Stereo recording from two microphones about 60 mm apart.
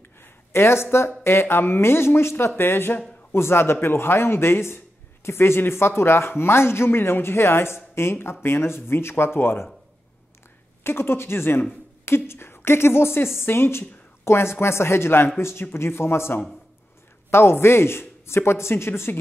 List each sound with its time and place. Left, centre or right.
0.2 s a sound: left
0.9 s a man's voice: left
10.8 s a man's voice: left